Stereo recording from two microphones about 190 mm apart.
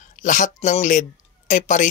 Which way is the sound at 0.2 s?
40° left (ahead or behind).